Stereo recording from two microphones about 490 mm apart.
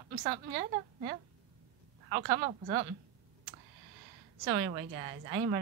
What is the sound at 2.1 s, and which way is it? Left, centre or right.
Speech, centre.